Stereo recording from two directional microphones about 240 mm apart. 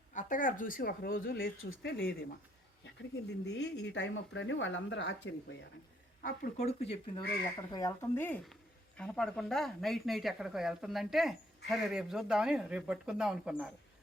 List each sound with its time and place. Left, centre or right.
0.1 s speech: left
3.4 s speech: left
6.2 s speech: left
7.7 s speech: centre